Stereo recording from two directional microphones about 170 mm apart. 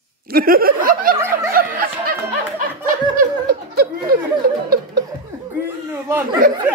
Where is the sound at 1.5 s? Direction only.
55° right (ahead or behind).